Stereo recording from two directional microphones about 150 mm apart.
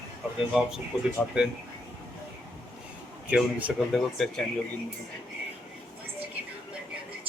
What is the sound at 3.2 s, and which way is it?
Speech, 10° right (ahead or behind).